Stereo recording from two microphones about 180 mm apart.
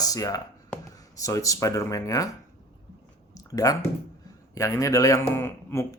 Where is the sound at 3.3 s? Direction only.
20° left (ahead or behind).